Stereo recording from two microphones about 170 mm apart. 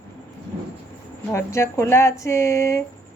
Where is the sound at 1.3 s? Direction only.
15° left (ahead or behind).